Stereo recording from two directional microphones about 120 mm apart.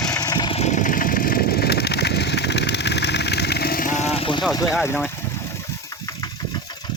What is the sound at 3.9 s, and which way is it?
Vehicle, 65° left (ahead or behind).